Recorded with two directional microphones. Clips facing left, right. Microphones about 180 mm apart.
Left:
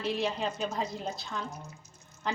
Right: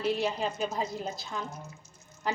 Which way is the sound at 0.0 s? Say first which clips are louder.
Right 2 dB; centre (ahead or behind).